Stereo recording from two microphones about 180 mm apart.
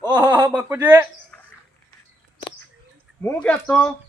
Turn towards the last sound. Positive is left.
turn(degrees=5)  # may be behind; listen again after turning